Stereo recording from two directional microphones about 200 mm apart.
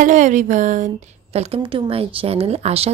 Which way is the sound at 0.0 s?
40° right (ahead or behind).